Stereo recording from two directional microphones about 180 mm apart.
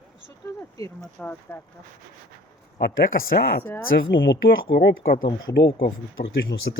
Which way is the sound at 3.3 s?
60° left (ahead or behind).